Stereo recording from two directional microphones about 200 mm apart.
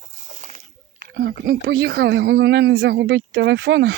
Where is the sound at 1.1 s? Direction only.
50° right (ahead or behind).